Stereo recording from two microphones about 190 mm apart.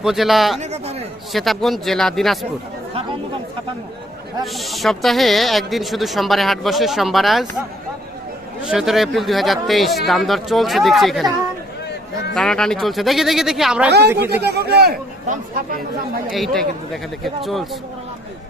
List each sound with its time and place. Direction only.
0.0 s speech: centre (ahead or behind)
0.6 s a sound: 35° right (ahead or behind)
1.3 s speech: centre (ahead or behind)
4.5 s speech: centre (ahead or behind)
8.6 s speech: 5° right (ahead or behind)
12.3 s speech: centre (ahead or behind)
14.4 s a man's voice: 60° right (ahead or behind)
16.3 s speech: centre (ahead or behind)